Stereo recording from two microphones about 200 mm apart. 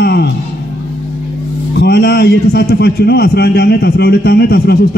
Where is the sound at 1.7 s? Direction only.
55° left (ahead or behind).